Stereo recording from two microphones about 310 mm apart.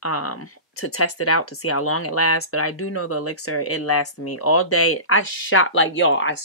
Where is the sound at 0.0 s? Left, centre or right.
Left.